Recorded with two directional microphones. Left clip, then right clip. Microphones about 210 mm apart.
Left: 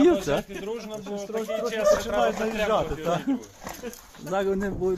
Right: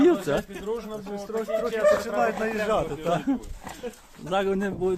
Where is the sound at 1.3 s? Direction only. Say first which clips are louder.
Right 2 dB; 10° right (ahead or behind).